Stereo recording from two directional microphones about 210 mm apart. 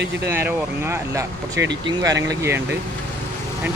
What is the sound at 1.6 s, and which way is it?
Speech, 55° right (ahead or behind).